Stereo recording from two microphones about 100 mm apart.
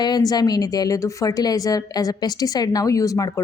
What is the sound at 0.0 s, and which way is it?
Speech, 40° left (ahead or behind).